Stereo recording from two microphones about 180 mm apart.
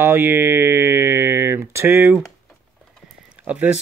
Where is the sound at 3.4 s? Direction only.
5° right (ahead or behind).